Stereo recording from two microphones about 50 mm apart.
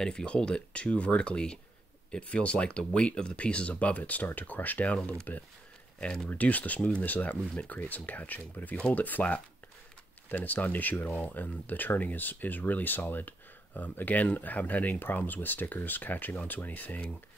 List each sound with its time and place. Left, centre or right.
0.0 s speech: centre; by 5.4 s left
5.9 s speech: centre
6.3 s speech: left
6.8 s speech: left
10.3 s speech: left